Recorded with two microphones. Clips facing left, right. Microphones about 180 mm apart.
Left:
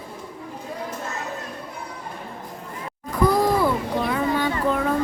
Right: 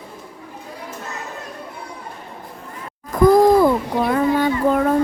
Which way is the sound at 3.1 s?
45° right (ahead or behind).